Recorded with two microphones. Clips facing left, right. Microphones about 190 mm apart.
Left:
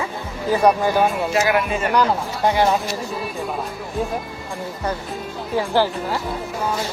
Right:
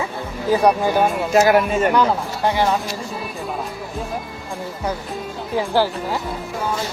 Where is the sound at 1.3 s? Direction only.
40° right (ahead or behind).